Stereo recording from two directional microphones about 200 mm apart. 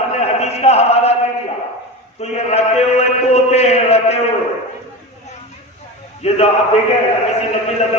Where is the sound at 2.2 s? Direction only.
30° left (ahead or behind).